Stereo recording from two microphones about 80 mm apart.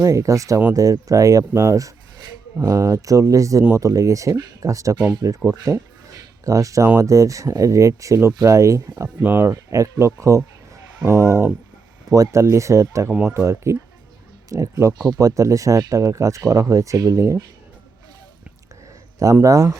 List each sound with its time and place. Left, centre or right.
0.0 s speech: right
5.5 s a sound: right
7.0 s speech: right
9.2 s speech: right
9.5 s speech: right
19.2 s speech: right